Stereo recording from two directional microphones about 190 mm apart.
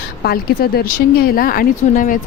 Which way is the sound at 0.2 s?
55° left (ahead or behind).